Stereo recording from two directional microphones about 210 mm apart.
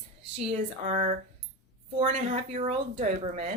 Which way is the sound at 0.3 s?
30° right (ahead or behind).